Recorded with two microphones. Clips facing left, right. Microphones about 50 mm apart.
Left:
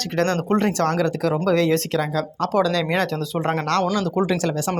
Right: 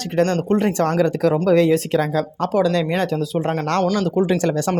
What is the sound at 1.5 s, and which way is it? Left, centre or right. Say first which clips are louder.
Speech: right 3 dB; centre.